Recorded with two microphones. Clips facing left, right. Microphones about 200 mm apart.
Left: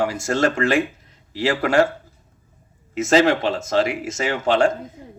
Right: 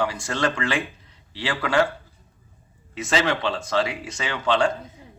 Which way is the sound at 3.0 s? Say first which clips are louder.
Left 7 dB; 45° left (ahead or behind).